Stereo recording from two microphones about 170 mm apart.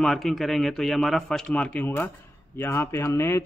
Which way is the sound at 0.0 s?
Centre (ahead or behind).